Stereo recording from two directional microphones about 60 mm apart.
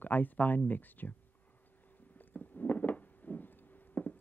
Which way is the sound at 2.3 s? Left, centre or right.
Left.